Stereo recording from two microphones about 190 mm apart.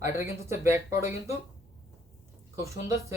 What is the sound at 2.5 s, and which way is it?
Speech, 15° right (ahead or behind).